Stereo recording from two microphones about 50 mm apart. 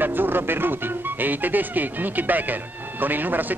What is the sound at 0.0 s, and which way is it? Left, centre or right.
Speech, right.